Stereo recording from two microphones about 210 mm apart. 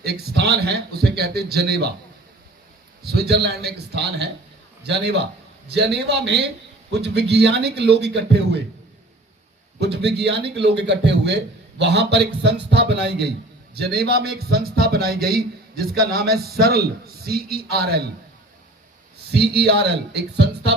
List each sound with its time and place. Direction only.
0.0 s a man's voice: 50° right (ahead or behind)
3.0 s a man's voice: 50° right (ahead or behind)
9.8 s a man's voice: 55° right (ahead or behind)
19.3 s a man's voice: 50° right (ahead or behind)